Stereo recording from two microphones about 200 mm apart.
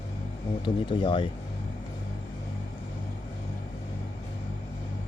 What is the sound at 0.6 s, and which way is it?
Speech, 25° left (ahead or behind).